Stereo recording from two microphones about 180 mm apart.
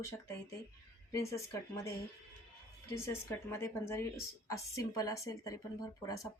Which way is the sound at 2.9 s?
15° left (ahead or behind).